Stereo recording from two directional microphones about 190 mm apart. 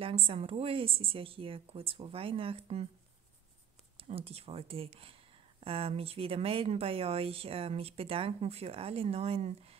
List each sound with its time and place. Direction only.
0.0 s a woman's voice: 30° right (ahead or behind)
3.9 s speech: 30° right (ahead or behind)